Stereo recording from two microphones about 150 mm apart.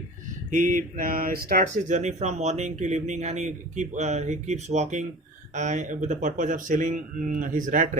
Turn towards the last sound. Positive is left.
turn(degrees=-60)  # may be behind; listen again after turning